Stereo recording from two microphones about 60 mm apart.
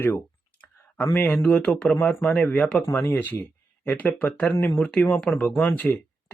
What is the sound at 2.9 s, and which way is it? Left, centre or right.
Speech, left.